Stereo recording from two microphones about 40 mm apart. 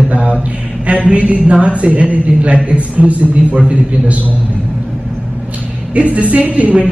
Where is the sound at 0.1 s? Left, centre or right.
Right.